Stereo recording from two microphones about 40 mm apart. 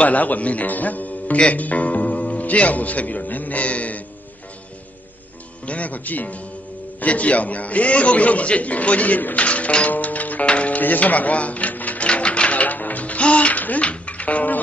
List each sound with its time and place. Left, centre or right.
0.0 s speech: left
5.7 s speech: left
9.8 s music: left
10.8 s speech: left
12.1 s music: left